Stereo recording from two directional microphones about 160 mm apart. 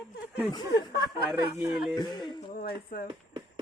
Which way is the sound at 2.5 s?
65° left (ahead or behind).